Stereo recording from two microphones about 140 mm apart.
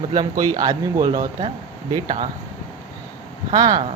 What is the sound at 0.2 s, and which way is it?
Speech, 25° right (ahead or behind).